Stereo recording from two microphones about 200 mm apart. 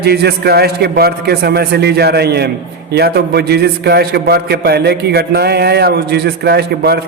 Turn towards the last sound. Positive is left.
turn(degrees=-55)  # may be behind; listen again after turning